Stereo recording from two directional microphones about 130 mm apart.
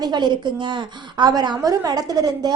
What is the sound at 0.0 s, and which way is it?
A woman's voice, 35° right (ahead or behind).